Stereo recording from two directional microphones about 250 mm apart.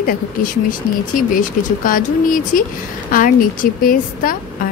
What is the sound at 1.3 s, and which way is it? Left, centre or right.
Speech, left.